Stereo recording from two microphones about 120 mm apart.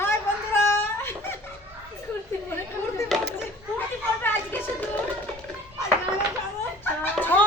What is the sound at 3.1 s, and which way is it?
Children playing, centre (ahead or behind).